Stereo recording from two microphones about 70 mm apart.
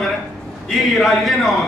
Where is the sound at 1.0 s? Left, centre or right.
Centre.